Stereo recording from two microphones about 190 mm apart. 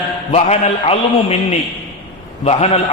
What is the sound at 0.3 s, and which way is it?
A man's voice, 35° left (ahead or behind).